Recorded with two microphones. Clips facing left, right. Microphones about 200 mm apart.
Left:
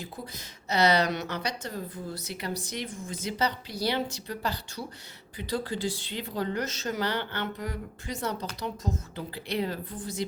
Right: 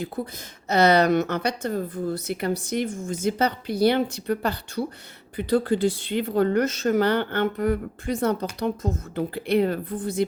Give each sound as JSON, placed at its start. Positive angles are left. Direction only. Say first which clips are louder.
{"t": 0.2, "sound": "a woman's voice", "louder": "right 10 dB", "side_deg": -60}